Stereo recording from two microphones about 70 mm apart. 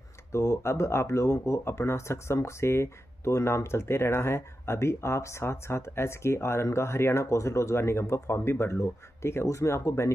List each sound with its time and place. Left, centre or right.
0.3 s speech: left